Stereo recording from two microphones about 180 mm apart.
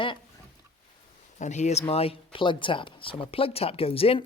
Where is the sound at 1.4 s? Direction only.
40° left (ahead or behind).